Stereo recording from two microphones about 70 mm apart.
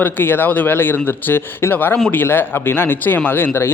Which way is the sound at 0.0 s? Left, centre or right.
Left.